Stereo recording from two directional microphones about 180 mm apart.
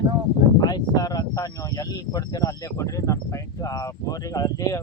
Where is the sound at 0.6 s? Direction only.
20° left (ahead or behind).